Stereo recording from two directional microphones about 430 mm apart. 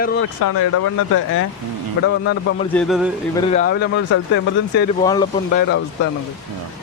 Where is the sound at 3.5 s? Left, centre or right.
Centre.